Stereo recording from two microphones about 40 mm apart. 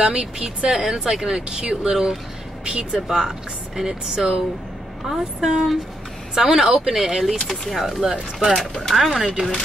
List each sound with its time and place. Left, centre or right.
0.0 s speech: centre
0.4 s speech: right
0.7 s speech: centre
8.0 s speech: centre
8.8 s speech: centre